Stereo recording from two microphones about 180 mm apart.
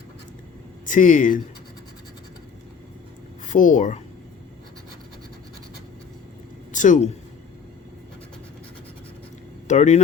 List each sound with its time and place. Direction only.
0.9 s speech: 45° left (ahead or behind)
3.4 s speech: 45° left (ahead or behind)
6.7 s a woman's voice: 45° left (ahead or behind)
9.6 s speech: 40° left (ahead or behind)